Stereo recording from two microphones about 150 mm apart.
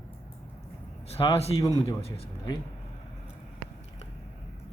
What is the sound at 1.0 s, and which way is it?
Speech, 40° left (ahead or behind).